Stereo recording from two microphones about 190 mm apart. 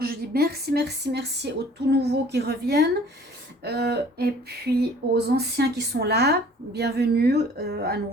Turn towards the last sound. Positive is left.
turn(degrees=-55)  # may be behind; listen again after turning